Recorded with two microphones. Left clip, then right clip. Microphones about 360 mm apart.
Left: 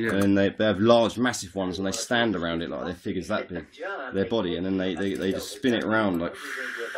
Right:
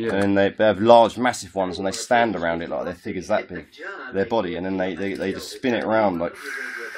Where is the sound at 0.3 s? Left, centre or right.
Right.